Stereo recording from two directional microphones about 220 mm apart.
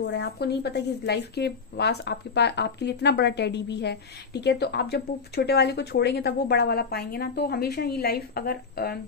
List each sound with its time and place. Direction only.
0.0 s speech: 50° left (ahead or behind)